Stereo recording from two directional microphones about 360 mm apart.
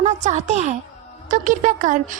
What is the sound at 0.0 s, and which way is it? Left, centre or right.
A woman's voice, centre.